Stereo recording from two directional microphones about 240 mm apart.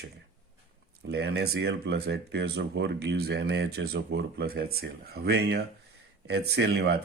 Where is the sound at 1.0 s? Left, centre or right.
Right.